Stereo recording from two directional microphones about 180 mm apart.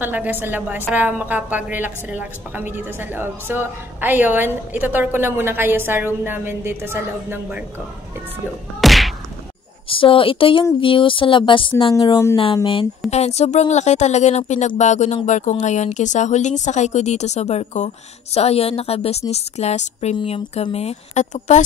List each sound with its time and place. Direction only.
0.0 s a woman's voice: 10° right (ahead or behind)
8.8 s whack: centre (ahead or behind)
9.8 s speech: 30° left (ahead or behind)
13.1 s speech: 35° left (ahead or behind)